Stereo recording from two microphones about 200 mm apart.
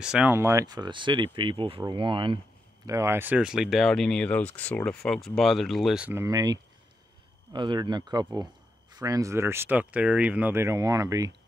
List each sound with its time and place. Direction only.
0.0 s speech: 5° right (ahead or behind); by 2.4 s 25° right (ahead or behind)
2.9 s speech: 15° right (ahead or behind)